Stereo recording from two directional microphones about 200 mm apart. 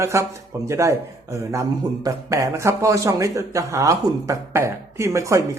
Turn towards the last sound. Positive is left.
turn(degrees=-15)  # may be behind; listen again after turning